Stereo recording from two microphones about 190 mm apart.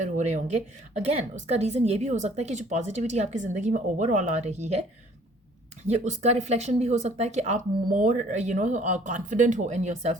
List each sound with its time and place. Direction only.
0.0 s speech: 40° right (ahead or behind)
5.9 s speech: 35° right (ahead or behind)